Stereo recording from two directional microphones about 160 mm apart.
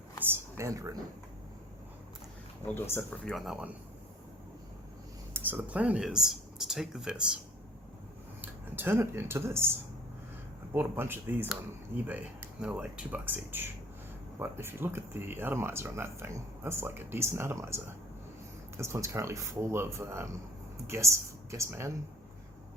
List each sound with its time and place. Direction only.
0.3 s speech: 15° right (ahead or behind)
2.7 s speech: 15° left (ahead or behind); by 3.7 s centre (ahead or behind)
5.3 s speech: 10° right (ahead or behind)
8.4 s speech: 15° right (ahead or behind)
10.8 s speech: 15° right (ahead or behind)